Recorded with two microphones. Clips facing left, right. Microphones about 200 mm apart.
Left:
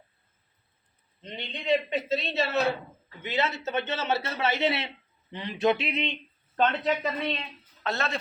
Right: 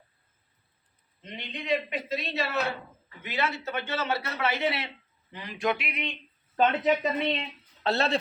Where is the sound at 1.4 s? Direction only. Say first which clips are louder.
Left 3 dB; 25° left (ahead or behind).